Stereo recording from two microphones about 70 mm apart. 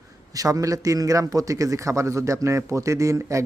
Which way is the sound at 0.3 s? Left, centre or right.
Right.